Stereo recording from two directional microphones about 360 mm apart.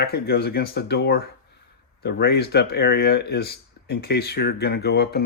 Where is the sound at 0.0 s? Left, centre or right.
Left.